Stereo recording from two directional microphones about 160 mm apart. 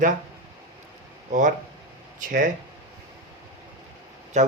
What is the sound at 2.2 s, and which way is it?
Speech, 55° right (ahead or behind).